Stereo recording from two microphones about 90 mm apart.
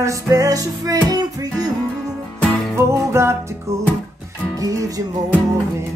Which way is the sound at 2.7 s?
30° right (ahead or behind).